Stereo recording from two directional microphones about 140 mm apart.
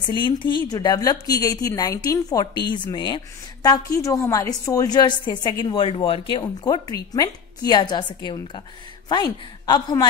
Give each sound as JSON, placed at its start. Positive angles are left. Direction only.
{"t": 0.0, "sound": "a woman's voice", "side_deg": 35}